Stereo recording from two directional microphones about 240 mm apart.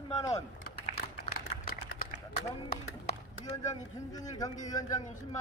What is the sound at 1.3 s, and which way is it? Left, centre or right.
Typing, left.